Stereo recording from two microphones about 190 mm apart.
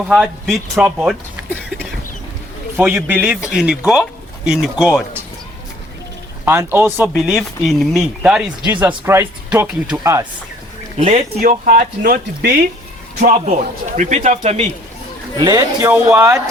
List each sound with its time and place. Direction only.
0.1 s speech: centre (ahead or behind)
6.4 s speech: 10° right (ahead or behind)
7.1 s speech: centre (ahead or behind); by 10.2 s 15° right (ahead or behind)
10.9 s speech: 35° right (ahead or behind)
11.3 s speech: 50° right (ahead or behind)
13.3 s a man's voice: 40° right (ahead or behind)
15.4 s speech: 20° right (ahead or behind)